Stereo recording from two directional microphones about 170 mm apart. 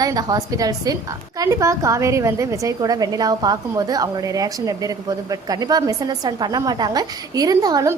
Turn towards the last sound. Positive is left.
turn(degrees=-20)  # may be behind; listen again after turning